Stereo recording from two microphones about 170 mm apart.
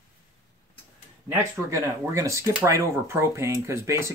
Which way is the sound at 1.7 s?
15° right (ahead or behind).